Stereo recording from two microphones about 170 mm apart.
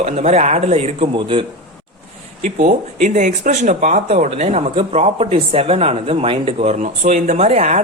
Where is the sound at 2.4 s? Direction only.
45° right (ahead or behind).